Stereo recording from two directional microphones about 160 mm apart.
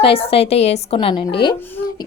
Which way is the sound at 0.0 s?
35° left (ahead or behind).